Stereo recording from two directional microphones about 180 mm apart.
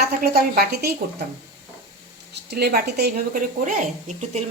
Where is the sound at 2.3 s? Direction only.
65° right (ahead or behind).